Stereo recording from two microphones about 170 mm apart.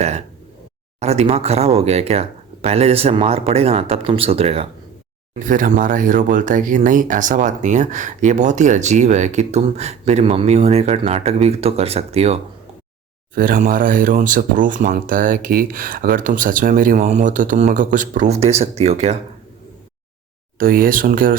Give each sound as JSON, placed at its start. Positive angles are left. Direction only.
{"t": 0.9, "sound": "speech", "side_deg": -40}
{"t": 5.4, "sound": "speech", "side_deg": -50}
{"t": 13.3, "sound": "speech", "side_deg": -55}
{"t": 20.6, "sound": "speech", "side_deg": -60}